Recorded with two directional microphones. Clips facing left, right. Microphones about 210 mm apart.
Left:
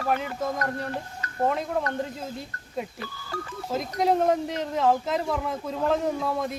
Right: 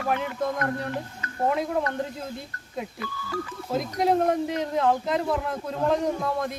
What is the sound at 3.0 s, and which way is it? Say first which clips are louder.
Speech: right 3 dB; 40° left (ahead or behind).